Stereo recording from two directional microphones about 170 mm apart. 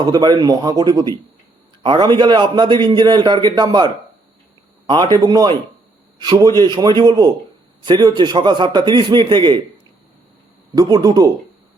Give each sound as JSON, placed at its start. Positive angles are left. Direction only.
{"t": 0.0, "sound": "a man's voice", "side_deg": -25}
{"t": 10.8, "sound": "a man's voice", "side_deg": -20}